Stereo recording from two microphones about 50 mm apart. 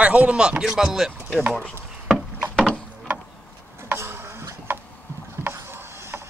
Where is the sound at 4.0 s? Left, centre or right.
Right.